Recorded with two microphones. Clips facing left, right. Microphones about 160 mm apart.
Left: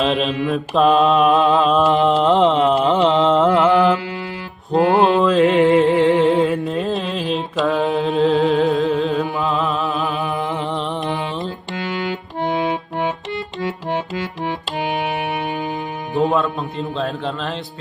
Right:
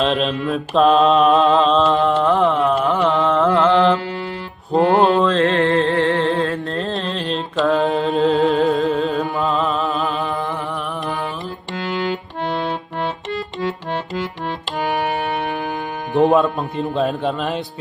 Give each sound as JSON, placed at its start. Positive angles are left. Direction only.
{"t": 0.0, "sound": "mantra", "side_deg": 0}
{"t": 1.7, "sound": "music", "side_deg": 20}
{"t": 3.7, "sound": "music", "side_deg": 5}
{"t": 5.4, "sound": "music", "side_deg": 15}
{"t": 6.6, "sound": "mantra", "side_deg": 0}
{"t": 11.7, "sound": "music", "side_deg": 0}
{"t": 16.1, "sound": "music", "side_deg": -20}
{"t": 16.9, "sound": "speech", "side_deg": -15}